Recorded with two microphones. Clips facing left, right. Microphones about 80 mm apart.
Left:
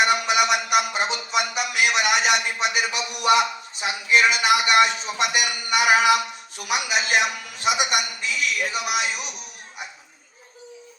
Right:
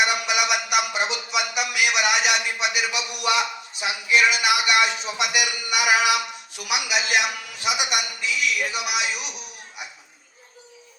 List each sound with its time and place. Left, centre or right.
0.0 s a man's voice: left